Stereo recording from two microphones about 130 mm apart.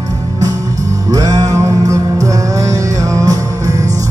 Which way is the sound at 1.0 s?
25° right (ahead or behind).